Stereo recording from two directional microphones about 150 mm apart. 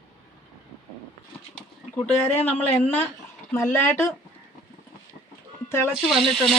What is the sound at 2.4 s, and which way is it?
Speech, 10° left (ahead or behind).